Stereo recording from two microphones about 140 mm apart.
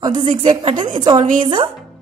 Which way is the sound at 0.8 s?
35° right (ahead or behind).